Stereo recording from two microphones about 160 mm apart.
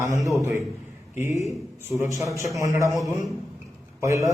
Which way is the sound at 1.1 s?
15° right (ahead or behind).